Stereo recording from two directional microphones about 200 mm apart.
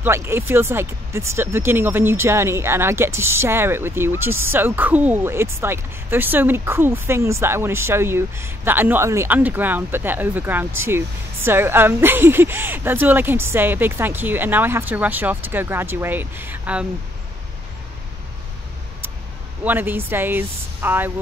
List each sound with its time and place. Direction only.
0.0 s speech: 15° right (ahead or behind)
19.6 s speech: 10° right (ahead or behind)